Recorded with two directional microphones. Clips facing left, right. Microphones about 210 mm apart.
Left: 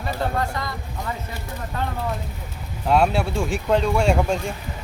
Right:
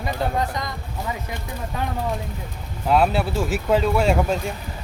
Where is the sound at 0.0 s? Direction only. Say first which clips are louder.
Right 1 dB; 15° right (ahead or behind).